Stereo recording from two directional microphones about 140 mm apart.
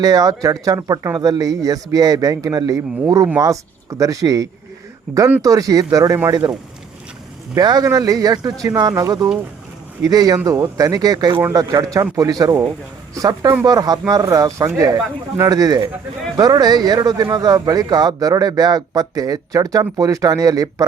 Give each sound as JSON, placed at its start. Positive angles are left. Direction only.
{"t": 0.0, "sound": "speech", "side_deg": -25}
{"t": 7.5, "sound": "speech", "side_deg": -30}
{"t": 11.3, "sound": "speech", "side_deg": -20}